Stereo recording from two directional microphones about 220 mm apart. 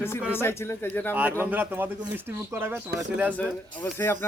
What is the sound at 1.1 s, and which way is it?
Speech, 10° right (ahead or behind).